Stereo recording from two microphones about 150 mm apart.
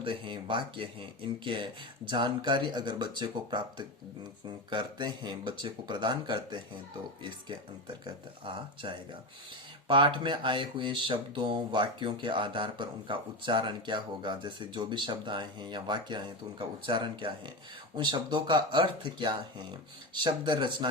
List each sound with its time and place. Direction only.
0.0 s speech: 35° right (ahead or behind)